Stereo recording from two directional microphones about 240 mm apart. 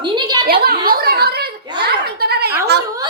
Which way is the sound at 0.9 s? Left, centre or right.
Right.